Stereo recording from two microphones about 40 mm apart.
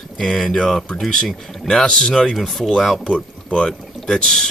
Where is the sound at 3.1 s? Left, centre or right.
Left.